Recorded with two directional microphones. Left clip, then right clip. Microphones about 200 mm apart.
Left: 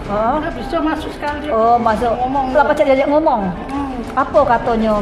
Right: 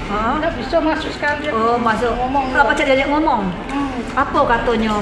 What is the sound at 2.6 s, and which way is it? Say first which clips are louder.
Speech: left 2 dB; 50° left (ahead or behind).